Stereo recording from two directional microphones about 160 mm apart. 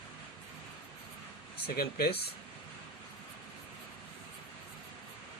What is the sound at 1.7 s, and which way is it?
Speech, 75° left (ahead or behind).